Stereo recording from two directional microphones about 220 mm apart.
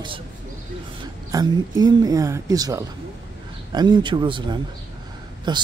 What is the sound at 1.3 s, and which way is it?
Speech, 20° right (ahead or behind).